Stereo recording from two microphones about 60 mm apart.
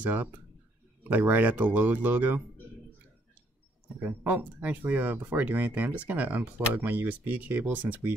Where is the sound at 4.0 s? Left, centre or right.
Right.